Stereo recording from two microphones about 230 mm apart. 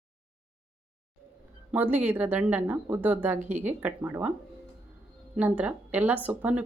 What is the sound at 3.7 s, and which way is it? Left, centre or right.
Speech, centre.